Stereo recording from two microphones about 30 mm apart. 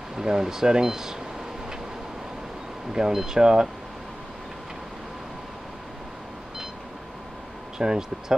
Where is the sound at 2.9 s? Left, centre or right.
Centre.